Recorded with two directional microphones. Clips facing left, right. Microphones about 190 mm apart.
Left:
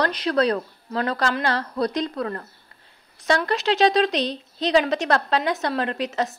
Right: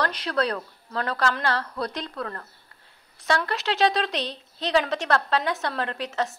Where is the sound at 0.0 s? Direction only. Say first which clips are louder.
Left 5 dB; 20° left (ahead or behind).